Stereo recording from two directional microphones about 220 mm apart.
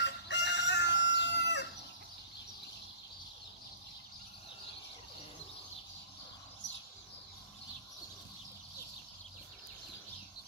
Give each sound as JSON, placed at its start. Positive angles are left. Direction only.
{"t": 0.0, "sound": "chicken", "side_deg": 55}